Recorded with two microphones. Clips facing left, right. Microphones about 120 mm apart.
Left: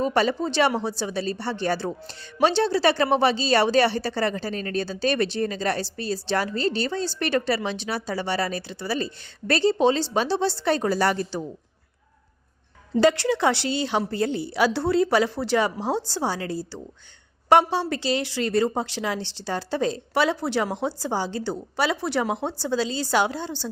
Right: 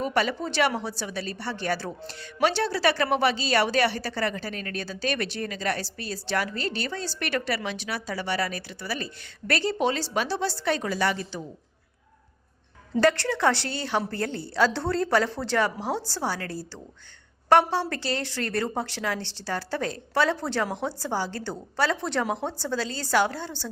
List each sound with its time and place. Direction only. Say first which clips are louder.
0.0 s speech: left 4 dB; 30° left (ahead or behind)
13.0 s a woman's voice: left 3 dB; 15° left (ahead or behind)